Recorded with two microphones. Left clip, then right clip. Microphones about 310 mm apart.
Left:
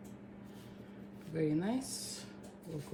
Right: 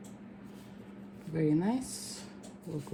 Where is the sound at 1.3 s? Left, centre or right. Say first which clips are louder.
Right 4 dB; right.